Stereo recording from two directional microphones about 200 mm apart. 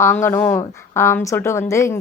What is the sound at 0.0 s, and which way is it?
A woman's voice, 15° left (ahead or behind).